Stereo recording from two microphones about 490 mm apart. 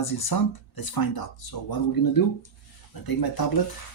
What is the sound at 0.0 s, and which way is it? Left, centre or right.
Speech, left.